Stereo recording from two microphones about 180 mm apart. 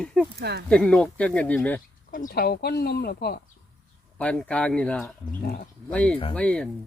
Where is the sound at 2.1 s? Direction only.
50° left (ahead or behind).